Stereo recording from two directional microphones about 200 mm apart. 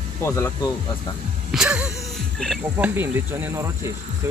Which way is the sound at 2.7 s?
10° right (ahead or behind).